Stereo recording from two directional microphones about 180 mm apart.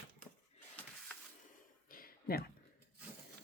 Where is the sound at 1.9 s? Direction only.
55° left (ahead or behind).